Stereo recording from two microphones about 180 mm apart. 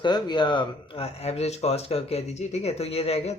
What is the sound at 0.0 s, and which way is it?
Speech, 25° left (ahead or behind).